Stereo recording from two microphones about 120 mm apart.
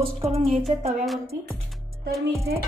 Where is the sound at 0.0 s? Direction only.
55° right (ahead or behind).